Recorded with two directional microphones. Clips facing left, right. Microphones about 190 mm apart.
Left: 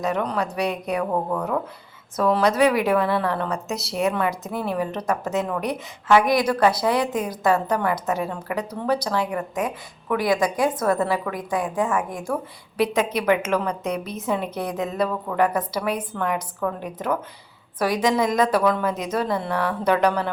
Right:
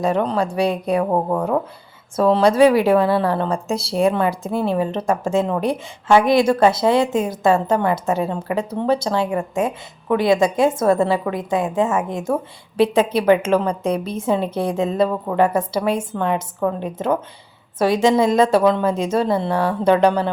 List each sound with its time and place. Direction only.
0.0 s a woman's voice: 30° right (ahead or behind)